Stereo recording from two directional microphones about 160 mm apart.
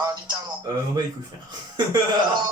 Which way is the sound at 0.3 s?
25° right (ahead or behind).